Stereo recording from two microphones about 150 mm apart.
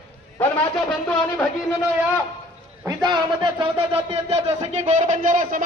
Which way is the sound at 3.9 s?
45° right (ahead or behind).